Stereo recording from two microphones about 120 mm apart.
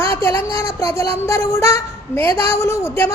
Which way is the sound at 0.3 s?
25° left (ahead or behind).